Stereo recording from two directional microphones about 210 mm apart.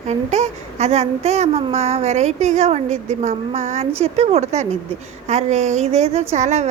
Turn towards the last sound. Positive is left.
turn(degrees=-35)  # may be behind; listen again after turning